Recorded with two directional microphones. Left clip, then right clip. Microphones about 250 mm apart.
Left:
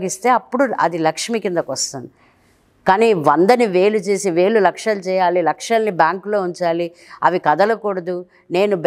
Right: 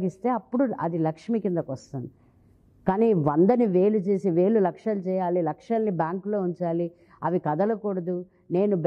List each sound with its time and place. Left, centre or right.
0.0 s a woman's voice: centre
6.1 s speech: centre
6.5 s speech: centre